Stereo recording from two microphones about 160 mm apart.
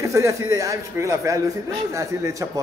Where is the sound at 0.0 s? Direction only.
20° right (ahead or behind).